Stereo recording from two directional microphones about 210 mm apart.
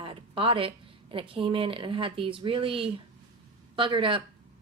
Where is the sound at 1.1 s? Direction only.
25° right (ahead or behind).